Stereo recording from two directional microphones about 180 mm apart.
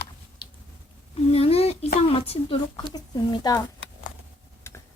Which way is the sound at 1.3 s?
35° left (ahead or behind).